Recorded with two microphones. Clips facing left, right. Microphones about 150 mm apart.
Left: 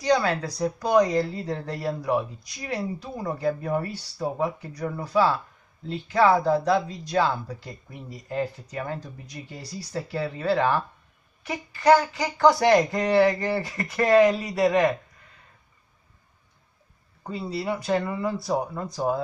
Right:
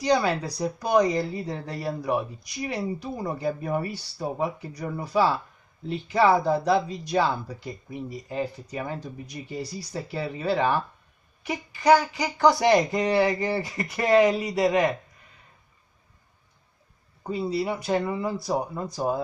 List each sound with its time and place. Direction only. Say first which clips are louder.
0.0 s speech: even; 15° right (ahead or behind)
11.8 s child singing: left 1 dB; centre (ahead or behind)
12.5 s speech: left 1 dB; 15° right (ahead or behind)
17.8 s speech: even; 10° right (ahead or behind)